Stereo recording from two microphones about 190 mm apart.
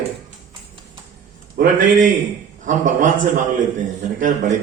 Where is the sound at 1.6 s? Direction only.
45° right (ahead or behind).